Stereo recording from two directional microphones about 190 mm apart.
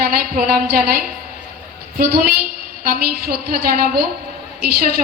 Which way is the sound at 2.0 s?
50° right (ahead or behind).